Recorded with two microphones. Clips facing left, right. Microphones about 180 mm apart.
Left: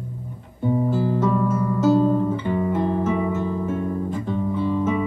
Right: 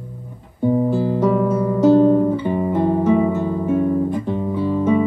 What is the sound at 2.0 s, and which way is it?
Guitar, 20° right (ahead or behind).